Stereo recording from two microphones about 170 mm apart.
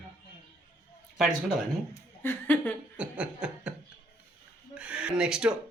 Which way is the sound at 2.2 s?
10° left (ahead or behind).